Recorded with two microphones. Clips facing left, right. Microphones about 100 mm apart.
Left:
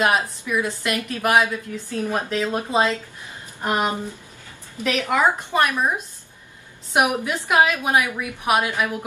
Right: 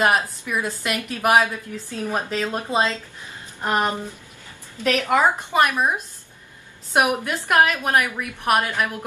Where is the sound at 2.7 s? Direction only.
15° left (ahead or behind).